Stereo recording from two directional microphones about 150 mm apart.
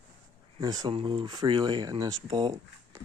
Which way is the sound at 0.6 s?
25° right (ahead or behind).